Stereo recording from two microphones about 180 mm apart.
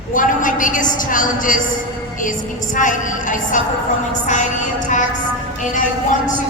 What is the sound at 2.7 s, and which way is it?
Speech, 45° left (ahead or behind).